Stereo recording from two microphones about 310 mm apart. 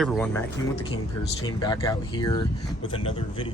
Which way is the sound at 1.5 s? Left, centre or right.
Centre.